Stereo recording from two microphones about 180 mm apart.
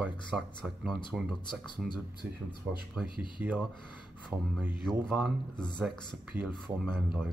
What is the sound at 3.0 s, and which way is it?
Speech, centre (ahead or behind).